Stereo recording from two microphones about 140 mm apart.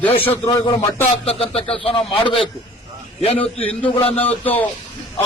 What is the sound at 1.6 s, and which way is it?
Speech, 45° left (ahead or behind).